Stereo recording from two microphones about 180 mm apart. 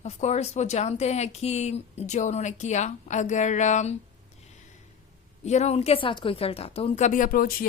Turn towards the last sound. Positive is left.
turn(degrees=50)  # may be behind; listen again after turning